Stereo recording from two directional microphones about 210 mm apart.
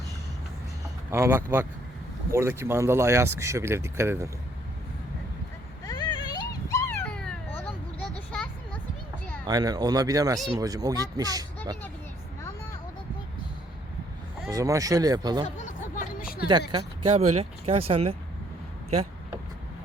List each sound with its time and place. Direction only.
1.1 s speech: 10° right (ahead or behind)
5.8 s a sound: 20° left (ahead or behind)
9.5 s speech: 20° right (ahead or behind)
14.4 s speech: 15° right (ahead or behind)
15.4 s a sound: 35° left (ahead or behind)
16.5 s speech: 20° right (ahead or behind)